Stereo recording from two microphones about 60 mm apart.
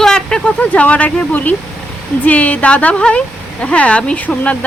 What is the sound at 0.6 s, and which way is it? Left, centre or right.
Speech, left.